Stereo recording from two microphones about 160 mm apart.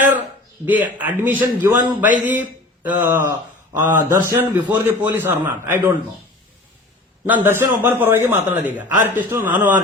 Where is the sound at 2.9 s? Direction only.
10° right (ahead or behind).